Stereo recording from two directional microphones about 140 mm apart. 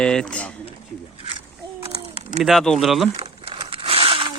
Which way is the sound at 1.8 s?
45° right (ahead or behind).